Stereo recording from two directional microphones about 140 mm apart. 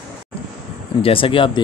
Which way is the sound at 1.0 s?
40° left (ahead or behind).